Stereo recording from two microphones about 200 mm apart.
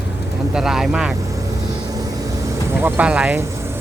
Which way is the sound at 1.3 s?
15° right (ahead or behind).